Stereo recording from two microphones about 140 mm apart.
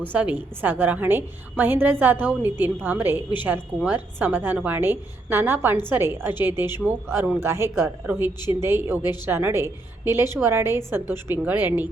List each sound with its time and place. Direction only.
0.1 s a woman's voice: 10° right (ahead or behind)